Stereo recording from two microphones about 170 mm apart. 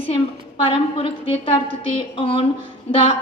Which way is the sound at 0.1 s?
30° left (ahead or behind).